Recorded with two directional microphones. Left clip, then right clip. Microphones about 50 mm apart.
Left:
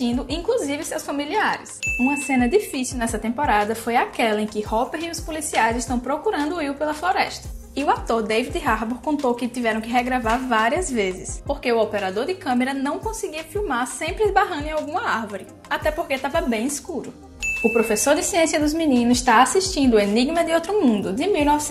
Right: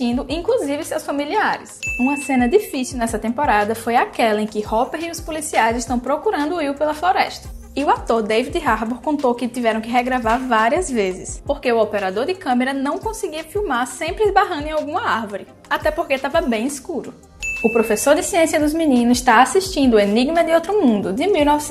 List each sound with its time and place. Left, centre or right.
0.0 s a woman's voice: right
6.1 s a woman's voice: right